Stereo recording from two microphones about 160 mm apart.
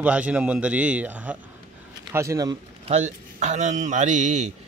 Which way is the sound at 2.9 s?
45° right (ahead or behind).